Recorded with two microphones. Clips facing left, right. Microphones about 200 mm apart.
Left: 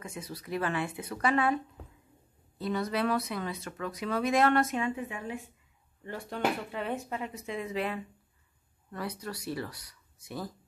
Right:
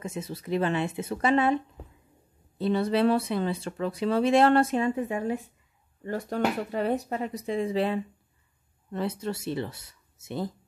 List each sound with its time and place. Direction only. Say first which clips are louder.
0.0 s speech: right 6 dB; 25° right (ahead or behind)
2.6 s speech: right 7 dB; 30° right (ahead or behind)